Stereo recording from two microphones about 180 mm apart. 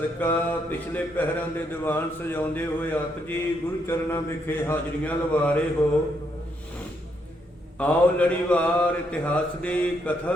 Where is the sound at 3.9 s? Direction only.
15° left (ahead or behind).